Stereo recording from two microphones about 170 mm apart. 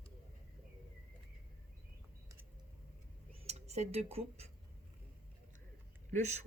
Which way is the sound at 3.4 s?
40° right (ahead or behind).